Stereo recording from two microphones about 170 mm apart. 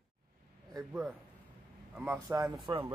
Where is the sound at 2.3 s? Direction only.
20° right (ahead or behind).